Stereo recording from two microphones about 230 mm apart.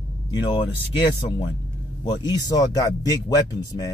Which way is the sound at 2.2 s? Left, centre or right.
Centre.